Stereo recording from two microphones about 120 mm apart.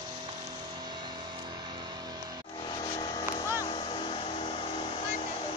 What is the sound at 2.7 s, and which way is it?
Vehicle, 40° left (ahead or behind).